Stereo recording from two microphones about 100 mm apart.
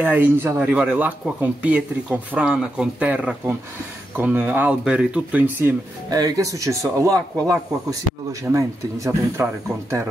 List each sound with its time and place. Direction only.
0.0 s speech: 15° right (ahead or behind)
6.0 s speech: 40° right (ahead or behind)